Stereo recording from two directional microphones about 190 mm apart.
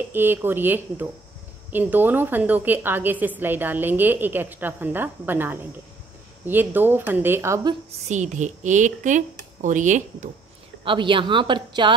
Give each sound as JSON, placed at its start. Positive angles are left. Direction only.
{"t": 0.1, "sound": "a woman's voice", "side_deg": -10}
{"t": 8.1, "sound": "speech", "side_deg": -40}
{"t": 10.8, "sound": "a woman's voice", "side_deg": -25}